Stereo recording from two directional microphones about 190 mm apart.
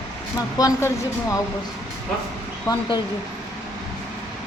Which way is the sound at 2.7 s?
20° left (ahead or behind).